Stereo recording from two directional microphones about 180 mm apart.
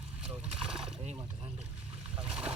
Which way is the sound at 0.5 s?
30° right (ahead or behind).